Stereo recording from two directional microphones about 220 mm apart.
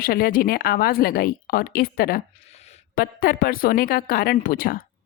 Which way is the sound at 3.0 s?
40° left (ahead or behind).